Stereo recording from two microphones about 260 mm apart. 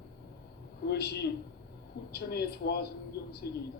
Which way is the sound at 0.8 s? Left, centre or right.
Left.